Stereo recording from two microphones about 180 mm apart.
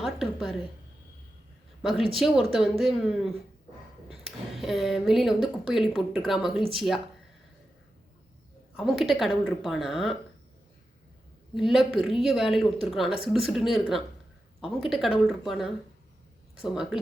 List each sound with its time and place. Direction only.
0.0 s a sound: centre (ahead or behind)
1.8 s speech: centre (ahead or behind)
8.7 s speech: centre (ahead or behind)
11.5 s speech: centre (ahead or behind)